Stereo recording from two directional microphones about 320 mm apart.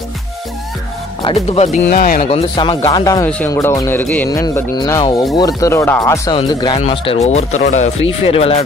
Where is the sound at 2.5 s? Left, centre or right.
Centre.